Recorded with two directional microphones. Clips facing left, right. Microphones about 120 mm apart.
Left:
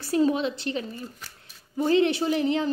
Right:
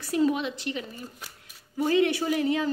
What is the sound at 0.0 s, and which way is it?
Speech, 30° left (ahead or behind).